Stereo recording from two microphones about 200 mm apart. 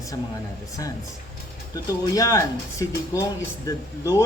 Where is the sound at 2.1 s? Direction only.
15° left (ahead or behind).